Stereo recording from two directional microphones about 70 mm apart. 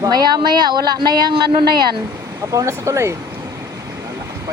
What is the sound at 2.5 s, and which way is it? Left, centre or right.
Speech, right.